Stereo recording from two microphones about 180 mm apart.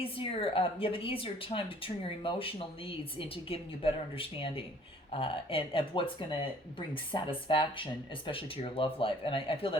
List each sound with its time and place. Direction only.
0.0 s a woman's voice: 30° left (ahead or behind)